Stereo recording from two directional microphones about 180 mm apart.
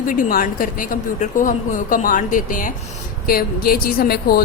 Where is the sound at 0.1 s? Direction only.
50° left (ahead or behind).